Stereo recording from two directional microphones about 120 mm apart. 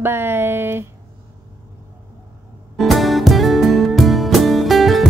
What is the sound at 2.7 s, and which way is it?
Music, centre (ahead or behind).